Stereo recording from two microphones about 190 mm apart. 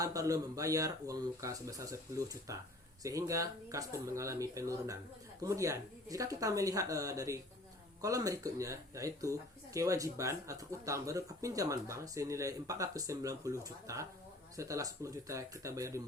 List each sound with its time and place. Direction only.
0.0 s speech: 20° right (ahead or behind)